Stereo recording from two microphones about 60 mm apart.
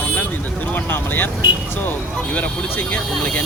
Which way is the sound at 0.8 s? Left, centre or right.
Left.